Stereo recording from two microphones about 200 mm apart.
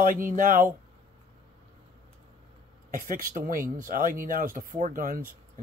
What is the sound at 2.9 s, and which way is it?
Speech, 45° right (ahead or behind).